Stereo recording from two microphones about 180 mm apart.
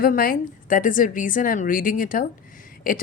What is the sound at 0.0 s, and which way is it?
Speech, 55° left (ahead or behind).